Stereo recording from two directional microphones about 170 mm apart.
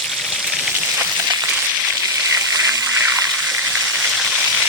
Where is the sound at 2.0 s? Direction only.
15° right (ahead or behind).